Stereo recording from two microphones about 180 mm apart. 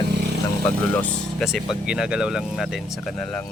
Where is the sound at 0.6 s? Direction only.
10° left (ahead or behind).